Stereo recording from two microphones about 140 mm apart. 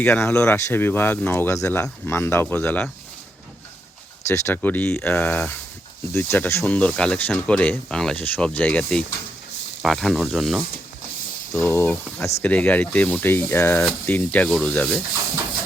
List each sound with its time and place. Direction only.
0.0 s speech: 15° left (ahead or behind)
4.3 s speech: 15° left (ahead or behind); by 10.6 s centre (ahead or behind)
11.5 s speech: 15° left (ahead or behind)